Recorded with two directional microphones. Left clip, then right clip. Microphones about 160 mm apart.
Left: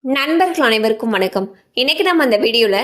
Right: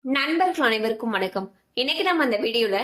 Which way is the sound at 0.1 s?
55° left (ahead or behind).